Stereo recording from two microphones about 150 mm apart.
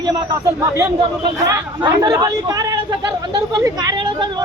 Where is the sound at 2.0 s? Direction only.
25° right (ahead or behind).